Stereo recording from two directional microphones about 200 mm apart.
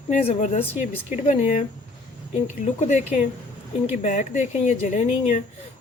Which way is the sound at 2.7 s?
35° left (ahead or behind).